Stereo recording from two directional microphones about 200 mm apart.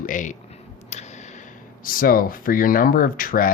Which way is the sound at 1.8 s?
45° left (ahead or behind).